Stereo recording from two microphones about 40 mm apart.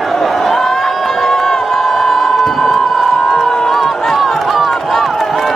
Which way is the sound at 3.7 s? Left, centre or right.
Centre.